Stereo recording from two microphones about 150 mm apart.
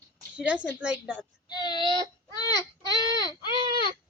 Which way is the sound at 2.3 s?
25° left (ahead or behind).